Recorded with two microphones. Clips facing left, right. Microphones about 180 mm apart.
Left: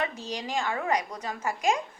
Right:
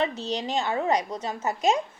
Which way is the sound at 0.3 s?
25° right (ahead or behind).